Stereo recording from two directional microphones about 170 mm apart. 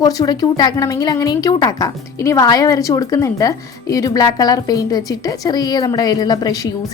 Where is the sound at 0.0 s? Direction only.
20° left (ahead or behind).